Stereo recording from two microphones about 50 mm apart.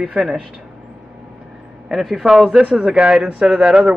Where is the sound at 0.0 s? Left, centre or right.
Centre.